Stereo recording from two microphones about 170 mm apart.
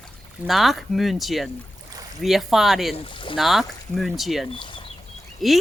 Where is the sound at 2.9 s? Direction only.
30° left (ahead or behind).